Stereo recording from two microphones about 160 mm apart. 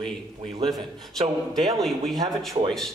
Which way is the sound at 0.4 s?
35° right (ahead or behind).